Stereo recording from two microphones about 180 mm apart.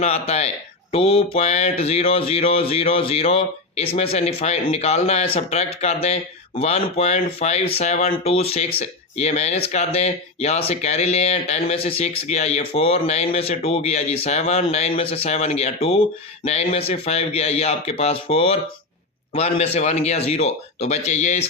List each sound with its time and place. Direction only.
0.0 s speech: 35° left (ahead or behind)